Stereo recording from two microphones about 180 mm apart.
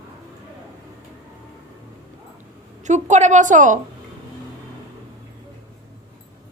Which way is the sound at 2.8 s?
40° right (ahead or behind).